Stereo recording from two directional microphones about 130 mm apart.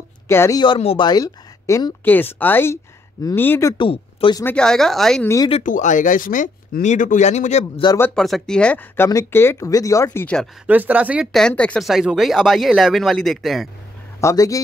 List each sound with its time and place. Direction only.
0.3 s speech: 20° left (ahead or behind)
0.7 s speech: 50° left (ahead or behind)
1.0 s speech: 30° left (ahead or behind)
2.0 s speech: 15° left (ahead or behind)
3.7 s speech: 45° left (ahead or behind)
4.6 s speech: 5° left (ahead or behind)
5.2 s speech: 25° left (ahead or behind)
5.6 s speech: 75° left (ahead or behind); by 7.8 s 60° left (ahead or behind)
8.1 s speech: 5° left (ahead or behind); by 10.2 s 25° left (ahead or behind)
10.2 s speech: 5° left (ahead or behind)
10.7 s speech: 10° right (ahead or behind)
11.3 s speech: 5° left (ahead or behind)
11.9 s speech: 5° right (ahead or behind)
14.2 s speech: 25° left (ahead or behind)